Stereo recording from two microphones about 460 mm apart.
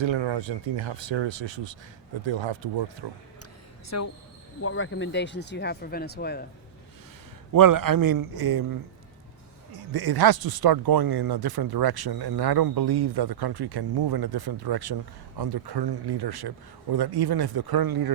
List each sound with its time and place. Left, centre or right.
0.0 s speech: right
3.8 s speech: left
7.5 s speech: right